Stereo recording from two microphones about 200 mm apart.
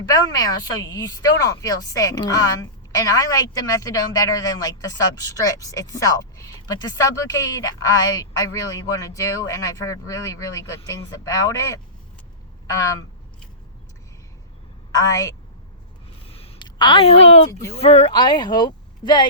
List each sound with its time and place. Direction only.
0.1 s a woman's voice: 20° left (ahead or behind)
14.9 s a woman's voice: 15° left (ahead or behind)
16.3 s a sound: 30° left (ahead or behind)
17.7 s a woman's voice: 30° left (ahead or behind)